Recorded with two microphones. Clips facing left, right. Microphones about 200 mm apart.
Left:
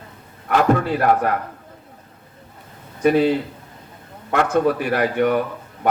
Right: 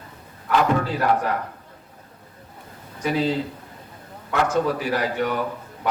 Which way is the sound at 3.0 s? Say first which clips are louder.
Left 6 dB; 55° left (ahead or behind).